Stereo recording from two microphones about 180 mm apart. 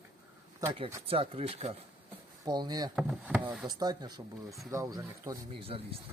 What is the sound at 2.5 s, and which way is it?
Speech, 20° right (ahead or behind).